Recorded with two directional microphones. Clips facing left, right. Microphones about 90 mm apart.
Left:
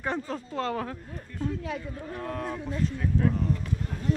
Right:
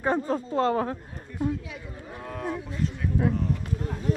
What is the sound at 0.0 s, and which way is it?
Speech, 30° right (ahead or behind).